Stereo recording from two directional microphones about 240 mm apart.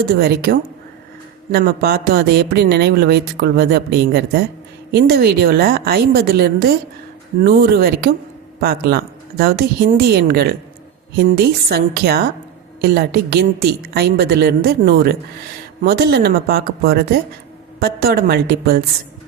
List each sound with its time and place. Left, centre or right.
0.2 s speech: right
1.5 s speech: right